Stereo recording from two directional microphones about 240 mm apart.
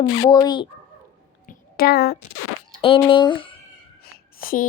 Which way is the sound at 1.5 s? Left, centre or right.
Left.